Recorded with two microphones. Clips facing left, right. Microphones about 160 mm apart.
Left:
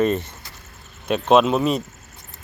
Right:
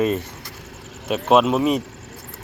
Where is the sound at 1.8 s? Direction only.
75° right (ahead or behind).